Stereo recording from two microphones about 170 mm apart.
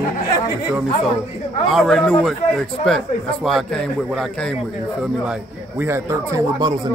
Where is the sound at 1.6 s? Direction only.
Centre (ahead or behind).